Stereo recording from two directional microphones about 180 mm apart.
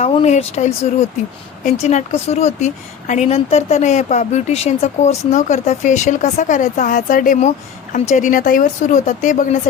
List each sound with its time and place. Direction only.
0.0 s speech: 35° left (ahead or behind)